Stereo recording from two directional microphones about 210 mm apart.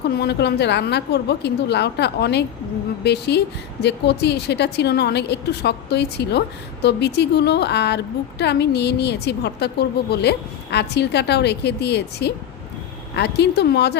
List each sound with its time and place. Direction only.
0.1 s a woman's voice: 50° left (ahead or behind)